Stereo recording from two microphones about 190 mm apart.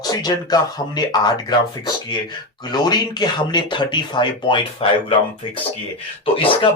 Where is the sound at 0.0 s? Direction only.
20° left (ahead or behind).